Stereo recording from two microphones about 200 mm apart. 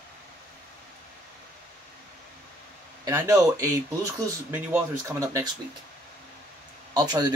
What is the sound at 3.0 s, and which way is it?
Speech, 15° right (ahead or behind).